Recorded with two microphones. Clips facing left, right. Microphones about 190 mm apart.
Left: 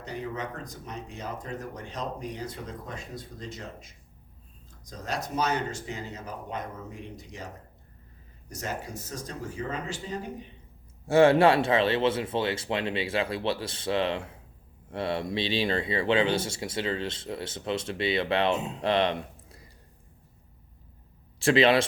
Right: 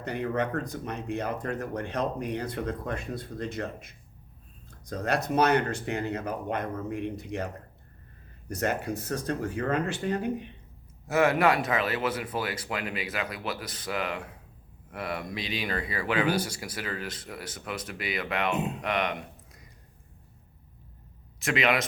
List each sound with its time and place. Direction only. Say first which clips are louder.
0.0 s speech: right 5 dB; 60° right (ahead or behind)
11.0 s speech: left 4 dB; 30° left (ahead or behind)
18.8 s a sound: left 4 dB; 30° left (ahead or behind)
21.3 s a man's voice: left 6 dB; 30° left (ahead or behind)